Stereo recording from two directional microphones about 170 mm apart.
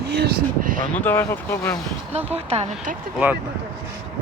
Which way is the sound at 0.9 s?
10° left (ahead or behind).